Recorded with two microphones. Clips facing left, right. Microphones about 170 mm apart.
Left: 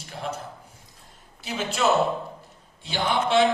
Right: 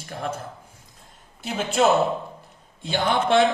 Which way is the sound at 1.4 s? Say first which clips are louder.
Right 4 dB; 55° right (ahead or behind).